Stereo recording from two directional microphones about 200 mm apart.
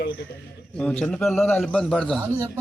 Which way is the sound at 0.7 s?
5° left (ahead or behind).